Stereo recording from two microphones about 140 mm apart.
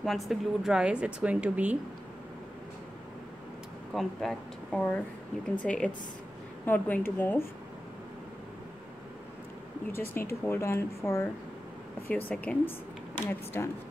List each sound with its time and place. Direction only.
0.0 s a woman's voice: centre (ahead or behind)
3.9 s a woman's voice: centre (ahead or behind)
9.9 s a woman's voice: 15° left (ahead or behind)